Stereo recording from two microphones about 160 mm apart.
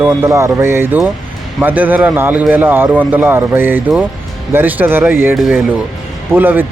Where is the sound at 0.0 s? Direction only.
15° right (ahead or behind).